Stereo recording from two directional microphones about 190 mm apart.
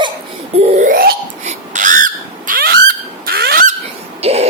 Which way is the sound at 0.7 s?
45° right (ahead or behind).